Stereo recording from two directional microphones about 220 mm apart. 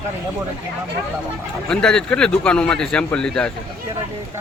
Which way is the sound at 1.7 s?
5° left (ahead or behind).